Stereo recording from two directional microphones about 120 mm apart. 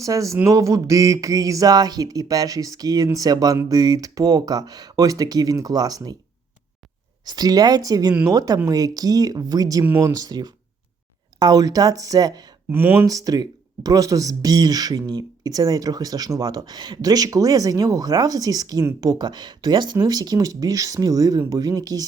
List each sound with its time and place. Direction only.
0.0 s speech: 25° right (ahead or behind)
7.3 s speech: 35° right (ahead or behind)
9.8 s speech: 15° right (ahead or behind)
10.1 s speech: 30° right (ahead or behind)
12.7 s speech: 15° right (ahead or behind)
13.1 s speech: 30° right (ahead or behind)